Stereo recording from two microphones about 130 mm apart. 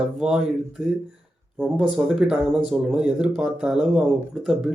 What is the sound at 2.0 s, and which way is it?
Speech, 5° right (ahead or behind).